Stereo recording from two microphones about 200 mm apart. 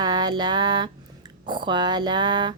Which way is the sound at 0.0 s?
20° right (ahead or behind).